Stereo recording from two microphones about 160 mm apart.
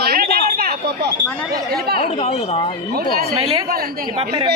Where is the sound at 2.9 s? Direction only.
70° right (ahead or behind).